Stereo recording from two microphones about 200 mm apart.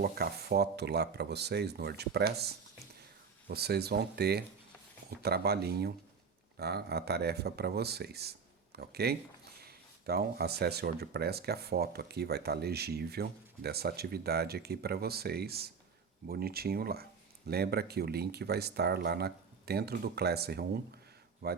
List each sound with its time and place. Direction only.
0.0 s speech: 50° right (ahead or behind)